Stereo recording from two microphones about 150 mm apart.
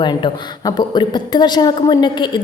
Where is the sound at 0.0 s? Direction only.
30° left (ahead or behind).